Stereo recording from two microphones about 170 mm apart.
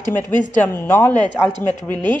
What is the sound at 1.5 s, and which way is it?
Speech, 25° right (ahead or behind).